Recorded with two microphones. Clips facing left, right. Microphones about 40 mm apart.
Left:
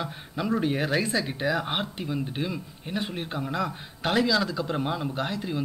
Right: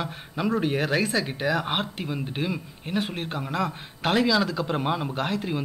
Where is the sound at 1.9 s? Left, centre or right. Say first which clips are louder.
Even; centre.